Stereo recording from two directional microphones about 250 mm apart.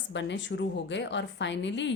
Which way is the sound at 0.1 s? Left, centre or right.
Left.